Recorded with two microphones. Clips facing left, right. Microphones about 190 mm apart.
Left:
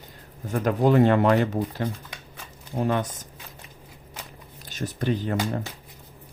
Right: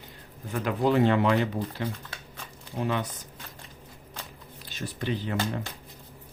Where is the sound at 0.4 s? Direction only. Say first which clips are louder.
Left 4 dB; 45° left (ahead or behind).